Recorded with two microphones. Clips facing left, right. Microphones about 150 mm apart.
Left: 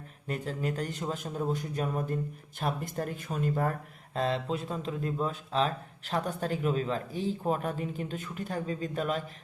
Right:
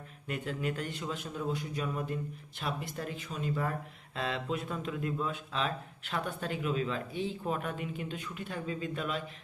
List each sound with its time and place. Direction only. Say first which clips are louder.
0.3 s speech: left 2 dB; 35° left (ahead or behind)